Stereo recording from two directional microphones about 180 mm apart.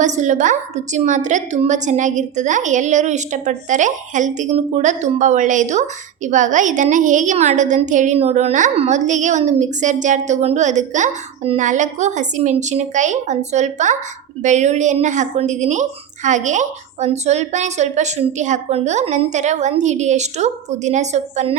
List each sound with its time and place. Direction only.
0.0 s a woman's voice: 40° right (ahead or behind)